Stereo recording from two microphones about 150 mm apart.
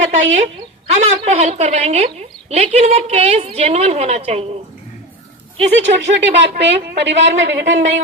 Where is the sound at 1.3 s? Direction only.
50° right (ahead or behind).